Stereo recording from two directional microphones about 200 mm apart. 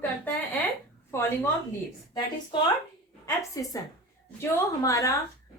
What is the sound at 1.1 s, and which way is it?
Speech, 10° left (ahead or behind).